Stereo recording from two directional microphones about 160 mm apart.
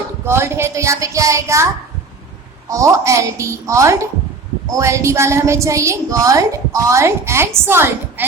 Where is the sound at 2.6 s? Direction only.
20° right (ahead or behind).